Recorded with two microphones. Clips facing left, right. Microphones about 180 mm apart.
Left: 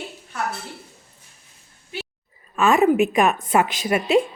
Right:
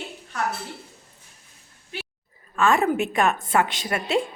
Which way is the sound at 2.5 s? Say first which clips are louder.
Left 4 dB; 20° left (ahead or behind).